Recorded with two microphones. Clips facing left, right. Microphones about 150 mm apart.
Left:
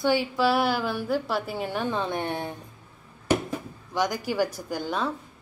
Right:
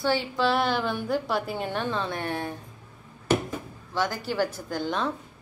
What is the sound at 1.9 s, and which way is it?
Speech, 20° left (ahead or behind).